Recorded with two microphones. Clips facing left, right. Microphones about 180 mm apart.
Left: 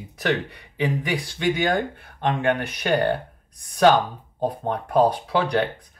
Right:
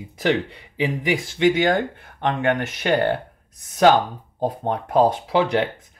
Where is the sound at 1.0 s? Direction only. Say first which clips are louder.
Right 4 dB; 25° right (ahead or behind).